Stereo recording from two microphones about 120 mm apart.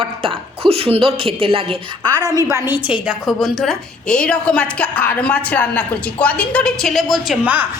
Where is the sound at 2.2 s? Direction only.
30° right (ahead or behind).